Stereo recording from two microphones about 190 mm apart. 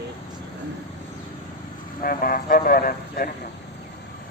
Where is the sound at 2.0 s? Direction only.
50° left (ahead or behind).